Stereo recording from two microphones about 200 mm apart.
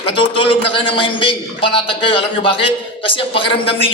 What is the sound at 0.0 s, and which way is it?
A man's voice, 25° left (ahead or behind).